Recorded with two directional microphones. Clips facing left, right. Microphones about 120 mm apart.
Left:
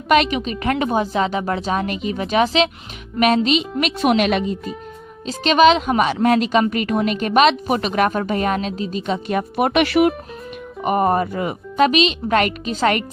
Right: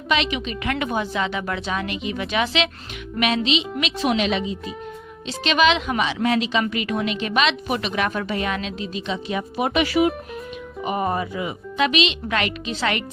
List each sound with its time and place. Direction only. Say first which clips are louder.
0.1 s a woman's voice: left 7 dB; 45° left (ahead or behind)
5.4 s a woman's voice: left 6 dB; 40° left (ahead or behind); by 10.1 s 65° left (ahead or behind)
10.8 s a woman's voice: left 6 dB; 50° left (ahead or behind)